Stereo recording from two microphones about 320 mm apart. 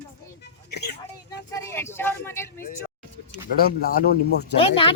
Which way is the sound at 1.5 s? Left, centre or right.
Centre.